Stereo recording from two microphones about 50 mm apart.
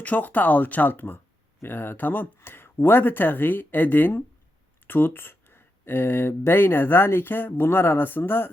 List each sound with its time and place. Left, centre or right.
0.0 s speech: left